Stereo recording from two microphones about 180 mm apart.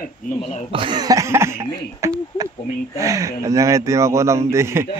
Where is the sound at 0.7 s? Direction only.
25° right (ahead or behind).